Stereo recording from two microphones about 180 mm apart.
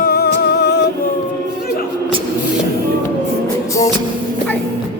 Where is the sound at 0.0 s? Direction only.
60° left (ahead or behind).